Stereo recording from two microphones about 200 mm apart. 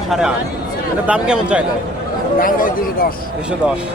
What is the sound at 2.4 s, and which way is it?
Speech, 45° left (ahead or behind).